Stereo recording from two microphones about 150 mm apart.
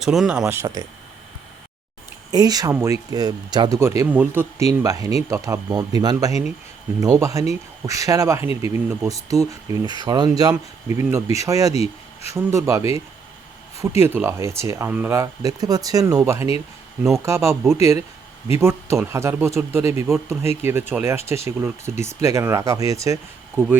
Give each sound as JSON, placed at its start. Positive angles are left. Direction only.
{"t": 0.0, "sound": "speech", "side_deg": -5}
{"t": 0.4, "sound": "a man's voice", "side_deg": -15}
{"t": 2.3, "sound": "a man's voice", "side_deg": -25}